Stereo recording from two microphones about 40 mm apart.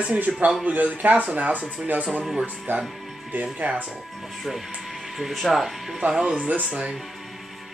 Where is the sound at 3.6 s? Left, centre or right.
Right.